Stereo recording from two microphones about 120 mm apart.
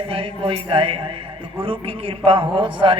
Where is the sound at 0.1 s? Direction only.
50° right (ahead or behind).